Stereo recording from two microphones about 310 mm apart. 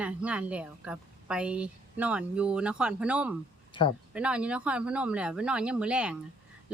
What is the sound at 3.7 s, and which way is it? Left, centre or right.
Speech, centre.